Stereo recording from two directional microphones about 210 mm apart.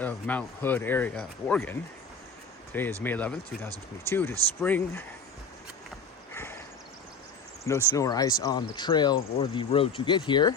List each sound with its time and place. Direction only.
0.0 s speech: 5° left (ahead or behind)
3.0 s speech: 10° left (ahead or behind)
6.3 s horse: 10° left (ahead or behind)
7.9 s speech: 15° left (ahead or behind)